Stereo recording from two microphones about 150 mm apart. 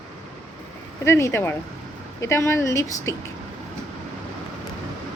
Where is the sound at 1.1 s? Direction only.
15° left (ahead or behind).